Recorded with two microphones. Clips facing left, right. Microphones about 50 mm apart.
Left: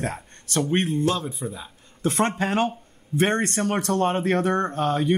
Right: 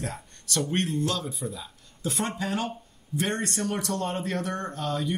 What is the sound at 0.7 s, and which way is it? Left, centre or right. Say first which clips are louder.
Speech: left 5 dB; left.